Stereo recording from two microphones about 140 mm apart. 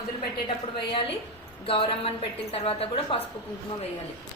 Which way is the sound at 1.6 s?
45° left (ahead or behind).